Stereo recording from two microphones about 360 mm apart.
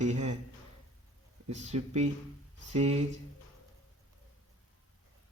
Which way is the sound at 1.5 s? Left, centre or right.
Centre.